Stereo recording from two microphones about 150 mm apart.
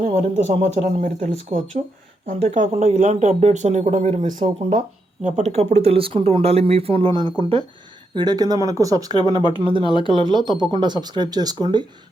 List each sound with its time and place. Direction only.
0.0 s speech: 50° right (ahead or behind)
5.2 s speech: 45° right (ahead or behind); by 9.1 s 25° right (ahead or behind)
9.1 s speech: 35° left (ahead or behind)
10.1 s speech: 35° right (ahead or behind)